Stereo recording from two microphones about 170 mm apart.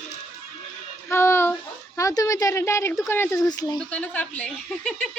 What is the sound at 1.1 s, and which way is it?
Speech, 15° left (ahead or behind).